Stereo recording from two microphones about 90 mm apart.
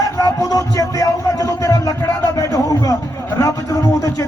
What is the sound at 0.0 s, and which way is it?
Music, 40° left (ahead or behind).